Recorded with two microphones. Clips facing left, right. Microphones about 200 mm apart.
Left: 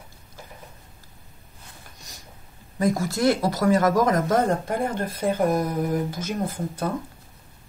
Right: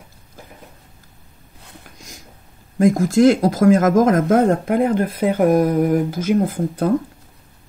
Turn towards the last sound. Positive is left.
turn(degrees=-55)  # may be behind; listen again after turning